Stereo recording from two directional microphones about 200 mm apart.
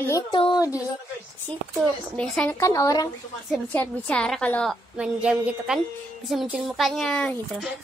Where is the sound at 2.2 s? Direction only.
10° left (ahead or behind).